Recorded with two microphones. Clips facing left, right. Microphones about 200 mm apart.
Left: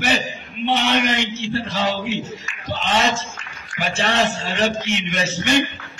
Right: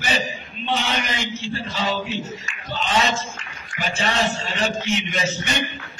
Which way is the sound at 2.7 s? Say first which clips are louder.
Left 2 dB; 80° left.